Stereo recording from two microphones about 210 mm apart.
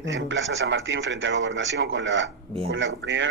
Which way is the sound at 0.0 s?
60° right (ahead or behind).